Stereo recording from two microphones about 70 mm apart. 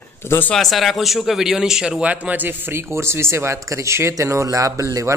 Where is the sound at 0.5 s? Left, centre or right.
Centre.